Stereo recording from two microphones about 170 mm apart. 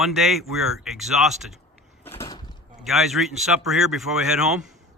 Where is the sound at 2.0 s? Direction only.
15° left (ahead or behind).